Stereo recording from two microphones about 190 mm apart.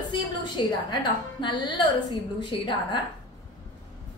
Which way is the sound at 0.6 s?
25° left (ahead or behind).